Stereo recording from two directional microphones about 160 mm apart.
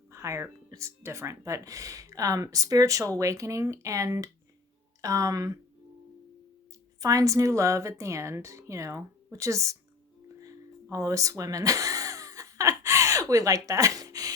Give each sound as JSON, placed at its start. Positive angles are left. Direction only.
{"t": 0.1, "sound": "music", "side_deg": -20}
{"t": 0.7, "sound": "speech", "side_deg": -20}
{"t": 7.0, "sound": "speech", "side_deg": -20}
{"t": 10.4, "sound": "music", "side_deg": -20}